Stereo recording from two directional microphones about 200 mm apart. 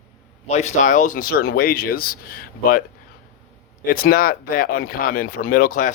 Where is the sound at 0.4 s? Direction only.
35° left (ahead or behind).